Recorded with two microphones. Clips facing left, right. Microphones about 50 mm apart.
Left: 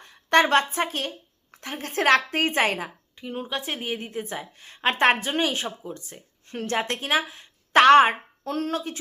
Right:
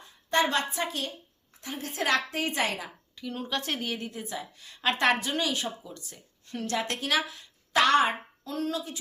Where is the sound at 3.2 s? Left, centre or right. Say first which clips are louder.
Left 2 dB; left.